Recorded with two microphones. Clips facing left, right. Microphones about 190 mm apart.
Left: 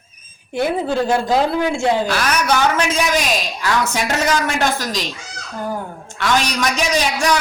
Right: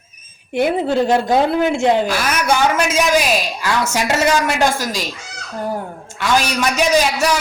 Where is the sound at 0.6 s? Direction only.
20° right (ahead or behind).